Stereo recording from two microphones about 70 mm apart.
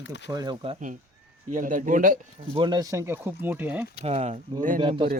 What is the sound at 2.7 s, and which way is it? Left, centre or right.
Speech, right.